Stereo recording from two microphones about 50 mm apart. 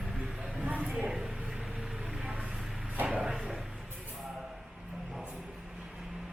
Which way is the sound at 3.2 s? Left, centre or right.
Centre.